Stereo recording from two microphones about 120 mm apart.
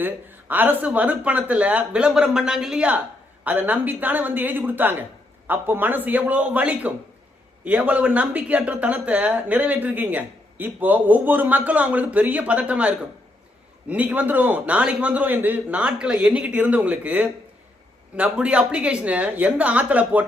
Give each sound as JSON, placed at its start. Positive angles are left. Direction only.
{"t": 0.0, "sound": "speech", "side_deg": -15}